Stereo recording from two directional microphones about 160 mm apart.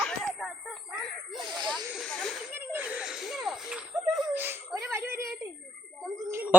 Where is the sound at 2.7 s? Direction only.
10° right (ahead or behind).